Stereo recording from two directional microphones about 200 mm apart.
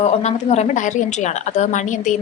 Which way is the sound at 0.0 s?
35° left (ahead or behind).